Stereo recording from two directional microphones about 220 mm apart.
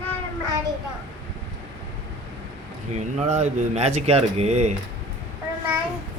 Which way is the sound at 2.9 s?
30° right (ahead or behind).